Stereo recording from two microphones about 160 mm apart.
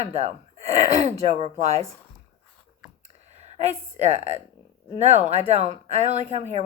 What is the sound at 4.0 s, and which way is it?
Speech, 45° right (ahead or behind).